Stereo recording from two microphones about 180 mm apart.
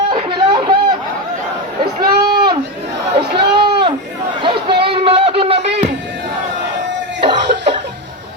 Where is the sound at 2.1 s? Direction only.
60° right (ahead or behind).